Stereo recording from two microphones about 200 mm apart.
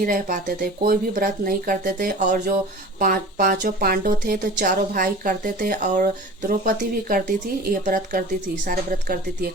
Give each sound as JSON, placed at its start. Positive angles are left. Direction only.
{"t": 0.0, "sound": "a woman's voice", "side_deg": -45}